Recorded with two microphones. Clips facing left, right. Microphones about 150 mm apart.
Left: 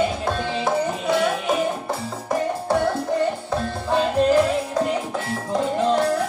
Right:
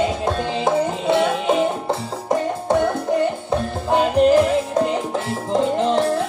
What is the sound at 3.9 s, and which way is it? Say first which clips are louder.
Music: right 3 dB; 20° right (ahead or behind).